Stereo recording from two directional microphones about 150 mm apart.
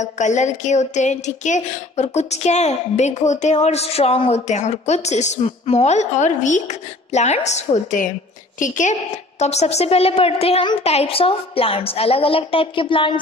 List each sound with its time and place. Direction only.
0.0 s a woman's voice: 50° left (ahead or behind)
9.4 s a woman's voice: 45° left (ahead or behind)